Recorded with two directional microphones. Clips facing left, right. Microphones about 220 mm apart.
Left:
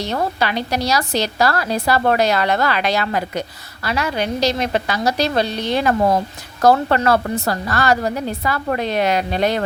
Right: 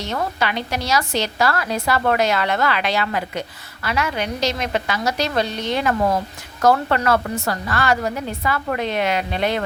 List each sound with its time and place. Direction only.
0.0 s a woman's voice: 35° left (ahead or behind)